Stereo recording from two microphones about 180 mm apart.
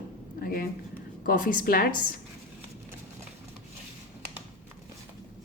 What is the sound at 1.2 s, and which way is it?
Speech, 50° left (ahead or behind).